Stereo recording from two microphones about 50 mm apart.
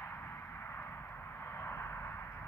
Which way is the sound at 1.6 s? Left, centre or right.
Left.